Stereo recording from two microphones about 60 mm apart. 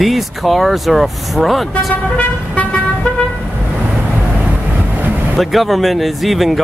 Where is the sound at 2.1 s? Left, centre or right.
Centre.